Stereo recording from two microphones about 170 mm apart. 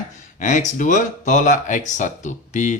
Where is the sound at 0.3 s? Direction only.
45° left (ahead or behind).